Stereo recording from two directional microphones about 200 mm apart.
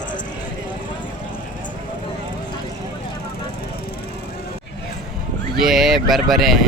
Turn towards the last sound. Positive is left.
turn(degrees=0)  # may be behind; listen again after turning